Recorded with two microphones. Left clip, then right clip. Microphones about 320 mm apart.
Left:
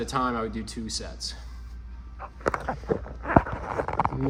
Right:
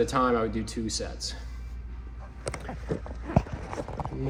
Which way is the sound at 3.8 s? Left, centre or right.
Left.